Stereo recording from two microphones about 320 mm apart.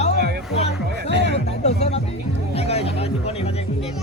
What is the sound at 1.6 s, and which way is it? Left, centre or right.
Music, centre.